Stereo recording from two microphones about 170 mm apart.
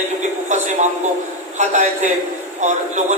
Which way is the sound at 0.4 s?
45° right (ahead or behind).